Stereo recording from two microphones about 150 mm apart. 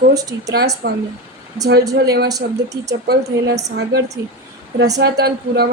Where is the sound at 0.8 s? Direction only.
90° right.